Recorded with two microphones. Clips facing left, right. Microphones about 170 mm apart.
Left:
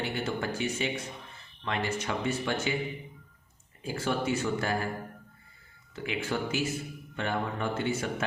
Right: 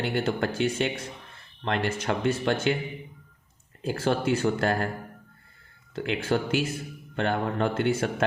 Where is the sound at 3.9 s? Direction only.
75° right (ahead or behind).